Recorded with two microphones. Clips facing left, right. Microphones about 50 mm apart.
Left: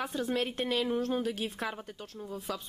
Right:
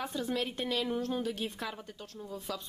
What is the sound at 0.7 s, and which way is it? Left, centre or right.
Speech, centre.